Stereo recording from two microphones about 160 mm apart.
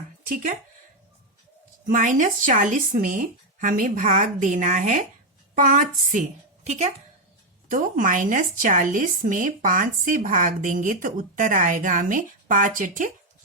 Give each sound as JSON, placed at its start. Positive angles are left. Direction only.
{"t": 1.9, "sound": "speech", "side_deg": -55}
{"t": 6.7, "sound": "speech", "side_deg": -45}
{"t": 7.7, "sound": "speech", "side_deg": -55}